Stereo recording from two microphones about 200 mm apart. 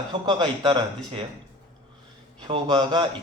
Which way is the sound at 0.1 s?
20° right (ahead or behind).